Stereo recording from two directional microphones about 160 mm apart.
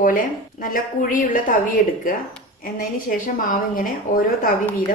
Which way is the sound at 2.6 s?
65° left (ahead or behind).